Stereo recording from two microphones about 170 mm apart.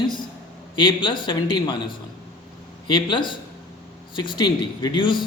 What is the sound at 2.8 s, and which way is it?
A man's voice, 30° left (ahead or behind).